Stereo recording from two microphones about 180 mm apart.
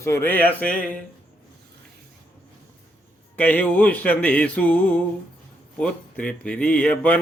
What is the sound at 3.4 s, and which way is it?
Speech, 10° left (ahead or behind).